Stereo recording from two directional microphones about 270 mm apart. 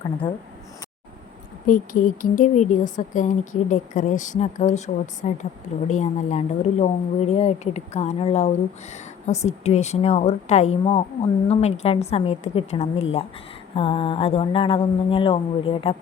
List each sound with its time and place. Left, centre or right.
1.6 s speech: left